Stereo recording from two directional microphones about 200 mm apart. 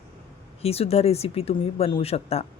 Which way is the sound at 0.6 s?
30° left (ahead or behind).